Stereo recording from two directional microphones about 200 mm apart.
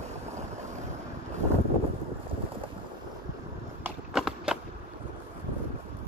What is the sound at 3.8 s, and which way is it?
Horse, 5° right (ahead or behind).